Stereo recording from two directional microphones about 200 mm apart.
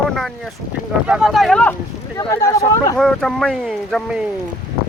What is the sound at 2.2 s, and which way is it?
Speech, 15° left (ahead or behind).